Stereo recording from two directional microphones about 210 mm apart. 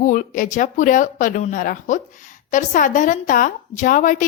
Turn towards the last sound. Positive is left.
turn(degrees=40)  # may be behind; listen again after turning